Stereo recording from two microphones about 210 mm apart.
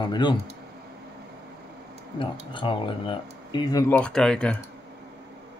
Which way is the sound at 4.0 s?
5° left (ahead or behind).